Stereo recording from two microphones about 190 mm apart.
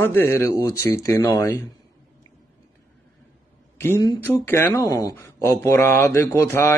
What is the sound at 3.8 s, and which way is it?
Speech, 15° left (ahead or behind).